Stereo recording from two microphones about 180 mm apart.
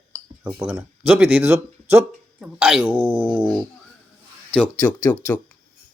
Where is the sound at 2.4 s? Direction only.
5° right (ahead or behind).